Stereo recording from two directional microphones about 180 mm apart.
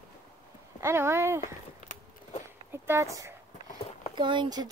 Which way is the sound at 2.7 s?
15° right (ahead or behind).